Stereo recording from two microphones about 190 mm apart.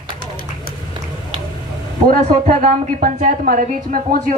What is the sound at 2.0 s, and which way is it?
A woman's voice, 45° right (ahead or behind).